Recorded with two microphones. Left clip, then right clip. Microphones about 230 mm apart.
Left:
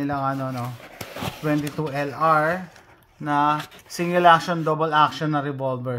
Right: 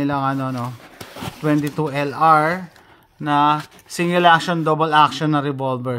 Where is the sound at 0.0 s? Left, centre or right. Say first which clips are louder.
Right 4 dB; right.